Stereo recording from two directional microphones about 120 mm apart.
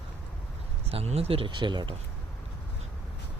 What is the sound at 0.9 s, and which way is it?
Speech, 55° right (ahead or behind).